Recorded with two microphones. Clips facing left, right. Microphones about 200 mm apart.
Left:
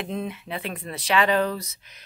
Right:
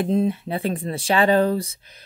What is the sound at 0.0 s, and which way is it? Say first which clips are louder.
Speech: right 10 dB; 30° right (ahead or behind).